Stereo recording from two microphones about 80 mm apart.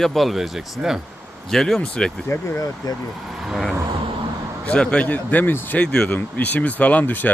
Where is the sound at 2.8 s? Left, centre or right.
Left.